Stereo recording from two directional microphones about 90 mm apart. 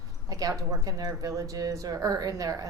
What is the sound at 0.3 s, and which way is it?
A woman's voice, 40° right (ahead or behind).